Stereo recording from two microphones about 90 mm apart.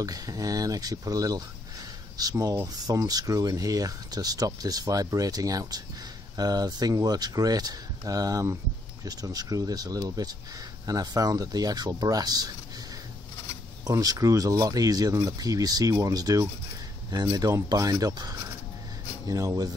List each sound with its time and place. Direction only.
0.0 s speech: 40° right (ahead or behind)
13.8 s speech: 40° right (ahead or behind)